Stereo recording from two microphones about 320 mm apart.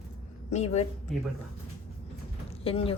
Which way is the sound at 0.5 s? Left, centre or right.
Centre.